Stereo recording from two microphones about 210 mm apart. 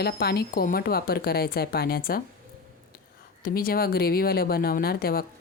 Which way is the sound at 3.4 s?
45° left (ahead or behind).